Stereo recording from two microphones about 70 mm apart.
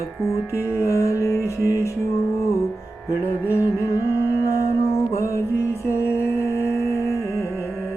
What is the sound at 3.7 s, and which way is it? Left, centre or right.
Music, left.